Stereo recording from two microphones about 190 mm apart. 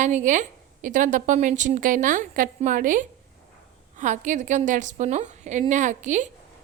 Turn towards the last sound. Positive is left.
turn(degrees=-40)  # may be behind; listen again after turning